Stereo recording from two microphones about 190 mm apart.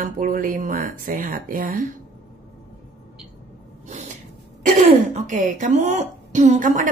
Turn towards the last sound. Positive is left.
turn(degrees=-40)  # may be behind; listen again after turning